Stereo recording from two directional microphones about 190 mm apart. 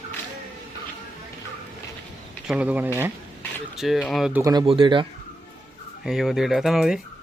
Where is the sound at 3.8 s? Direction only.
Centre (ahead or behind).